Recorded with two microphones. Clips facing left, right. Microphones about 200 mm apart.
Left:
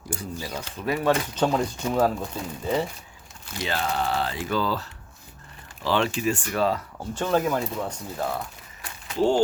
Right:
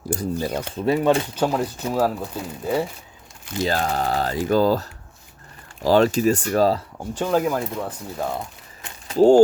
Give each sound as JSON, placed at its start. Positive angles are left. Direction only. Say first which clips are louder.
{"t": 0.3, "sound": "speech", "louder": "right 8 dB", "side_deg": -55}
{"t": 0.8, "sound": "speech", "louder": "right 4 dB", "side_deg": -25}
{"t": 1.4, "sound": "speech", "louder": "right 1 dB", "side_deg": -5}
{"t": 3.6, "sound": "speech", "louder": "right 5 dB", "side_deg": -40}
{"t": 7.1, "sound": "speech", "louder": "right 2 dB", "side_deg": -10}
{"t": 8.2, "sound": "a sound", "louder": "right 2 dB", "side_deg": -20}
{"t": 9.0, "sound": "speech", "louder": "right 8 dB", "side_deg": -40}